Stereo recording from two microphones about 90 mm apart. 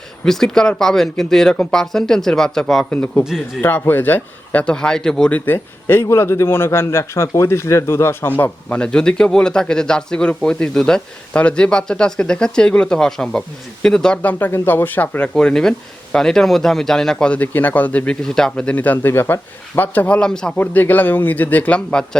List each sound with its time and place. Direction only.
0.3 s speech: 5° left (ahead or behind)
2.9 s a man's voice: 15° left (ahead or behind)
3.2 s speech: 5° right (ahead or behind)
3.6 s a man's voice: 25° left (ahead or behind)
5.5 s a man's voice: 25° left (ahead or behind)
15.4 s a man's voice: 5° left (ahead or behind)
20.6 s speech: 20° left (ahead or behind)